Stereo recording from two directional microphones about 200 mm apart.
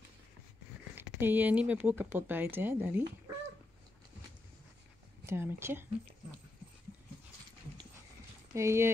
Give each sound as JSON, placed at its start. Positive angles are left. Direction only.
{"t": 1.2, "sound": "speech", "side_deg": -10}
{"t": 5.2, "sound": "speech", "side_deg": -10}
{"t": 8.5, "sound": "speech", "side_deg": -15}